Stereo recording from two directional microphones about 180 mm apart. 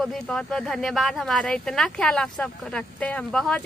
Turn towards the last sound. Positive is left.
turn(degrees=5)  # may be behind; listen again after turning